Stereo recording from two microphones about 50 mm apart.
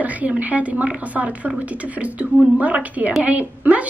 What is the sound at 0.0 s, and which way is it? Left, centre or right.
A woman's voice, right.